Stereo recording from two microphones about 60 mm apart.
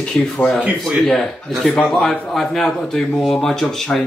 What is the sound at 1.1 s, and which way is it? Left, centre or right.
A man's voice, centre.